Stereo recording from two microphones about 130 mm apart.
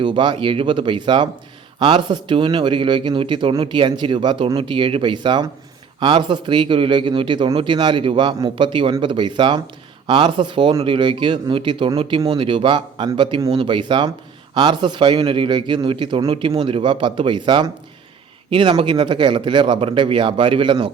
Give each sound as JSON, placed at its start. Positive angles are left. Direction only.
{"t": 0.0, "sound": "a man's voice", "side_deg": -40}